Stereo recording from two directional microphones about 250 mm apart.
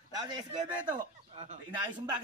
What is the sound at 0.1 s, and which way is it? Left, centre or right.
A man's voice, centre.